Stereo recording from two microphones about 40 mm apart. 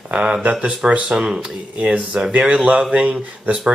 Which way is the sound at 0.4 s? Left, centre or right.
Right.